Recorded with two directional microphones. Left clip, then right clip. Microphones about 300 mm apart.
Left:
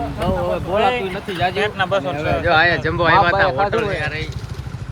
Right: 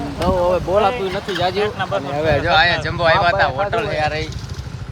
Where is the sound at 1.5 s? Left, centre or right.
Left.